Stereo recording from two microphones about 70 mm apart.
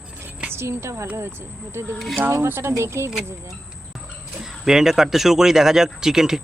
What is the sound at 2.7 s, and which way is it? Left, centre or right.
Speech, right.